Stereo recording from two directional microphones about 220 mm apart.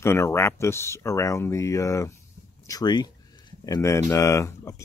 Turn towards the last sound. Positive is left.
turn(degrees=15)  # may be behind; listen again after turning